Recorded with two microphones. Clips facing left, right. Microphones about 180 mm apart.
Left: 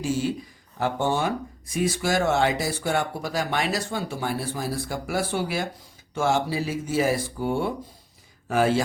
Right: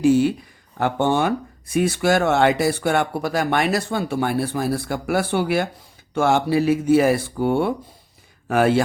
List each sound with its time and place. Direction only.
0.0 s speech: 60° right (ahead or behind)